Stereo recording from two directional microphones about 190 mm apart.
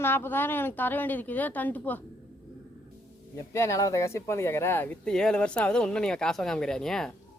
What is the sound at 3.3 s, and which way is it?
Speech, 15° left (ahead or behind).